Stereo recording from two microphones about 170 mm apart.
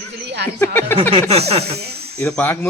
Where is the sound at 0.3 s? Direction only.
80° right.